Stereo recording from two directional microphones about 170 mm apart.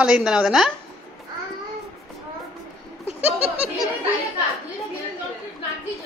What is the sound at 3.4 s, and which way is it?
Laughter, 35° right (ahead or behind).